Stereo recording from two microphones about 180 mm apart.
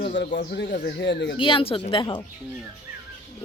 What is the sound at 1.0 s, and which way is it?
Speech, 75° left (ahead or behind).